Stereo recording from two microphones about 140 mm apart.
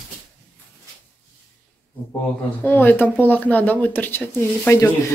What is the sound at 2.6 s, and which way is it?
A woman's voice, 15° left (ahead or behind).